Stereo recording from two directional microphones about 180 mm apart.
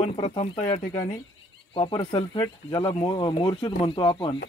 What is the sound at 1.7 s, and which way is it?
Speech, 30° left (ahead or behind).